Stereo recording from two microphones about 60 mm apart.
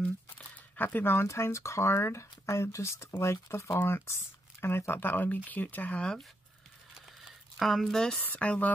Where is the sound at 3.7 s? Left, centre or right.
Left.